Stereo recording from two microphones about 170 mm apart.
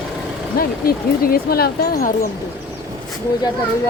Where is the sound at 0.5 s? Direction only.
60° left (ahead or behind).